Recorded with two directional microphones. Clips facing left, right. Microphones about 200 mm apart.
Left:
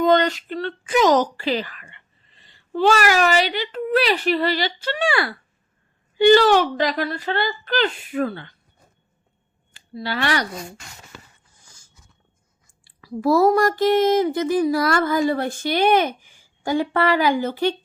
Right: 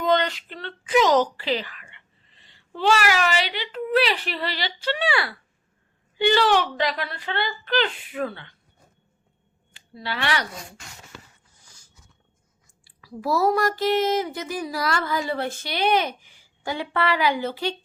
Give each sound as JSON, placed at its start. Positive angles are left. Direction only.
{"t": 0.0, "sound": "speech", "side_deg": 45}
{"t": 9.7, "sound": "speech", "side_deg": 40}
{"t": 13.0, "sound": "speech", "side_deg": 50}